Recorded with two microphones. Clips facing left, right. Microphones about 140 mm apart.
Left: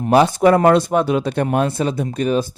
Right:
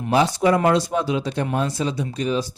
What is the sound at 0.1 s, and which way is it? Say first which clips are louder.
Speech: left 5 dB; 60° left (ahead or behind).